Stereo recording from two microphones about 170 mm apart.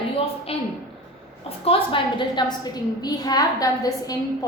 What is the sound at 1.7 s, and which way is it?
A woman's voice, 30° left (ahead or behind).